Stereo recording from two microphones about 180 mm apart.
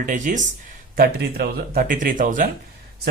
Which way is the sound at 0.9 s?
60° right (ahead or behind).